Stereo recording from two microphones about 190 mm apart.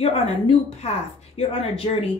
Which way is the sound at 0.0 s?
30° left (ahead or behind).